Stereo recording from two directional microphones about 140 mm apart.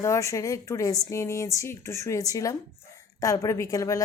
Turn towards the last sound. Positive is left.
turn(degrees=25)  # may be behind; listen again after turning